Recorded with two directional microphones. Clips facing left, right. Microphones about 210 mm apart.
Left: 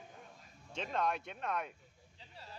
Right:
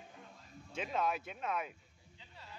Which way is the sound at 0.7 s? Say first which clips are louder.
Even; 5° right (ahead or behind).